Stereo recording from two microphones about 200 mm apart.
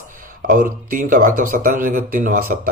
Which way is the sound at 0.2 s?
45° right (ahead or behind).